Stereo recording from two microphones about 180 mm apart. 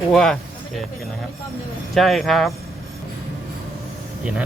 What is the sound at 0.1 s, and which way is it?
Speech, centre (ahead or behind).